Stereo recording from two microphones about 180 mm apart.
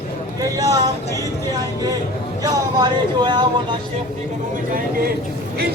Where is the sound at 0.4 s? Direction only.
20° right (ahead or behind).